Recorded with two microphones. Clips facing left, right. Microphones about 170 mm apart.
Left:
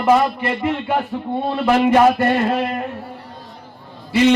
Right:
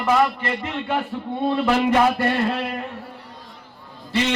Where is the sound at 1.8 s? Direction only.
50° left (ahead or behind).